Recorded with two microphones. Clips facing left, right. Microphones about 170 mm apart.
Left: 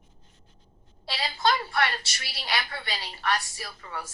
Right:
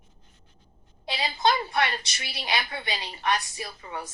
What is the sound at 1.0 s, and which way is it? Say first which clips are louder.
A woman's voice: right 1 dB; 20° right (ahead or behind).